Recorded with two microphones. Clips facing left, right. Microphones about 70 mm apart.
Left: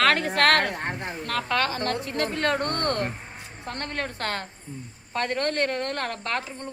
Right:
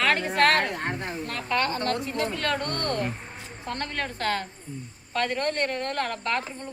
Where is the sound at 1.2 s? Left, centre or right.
Left.